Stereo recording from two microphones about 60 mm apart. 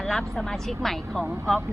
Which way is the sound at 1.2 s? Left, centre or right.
Right.